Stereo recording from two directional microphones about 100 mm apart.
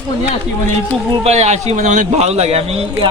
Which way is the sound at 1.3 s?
90° right.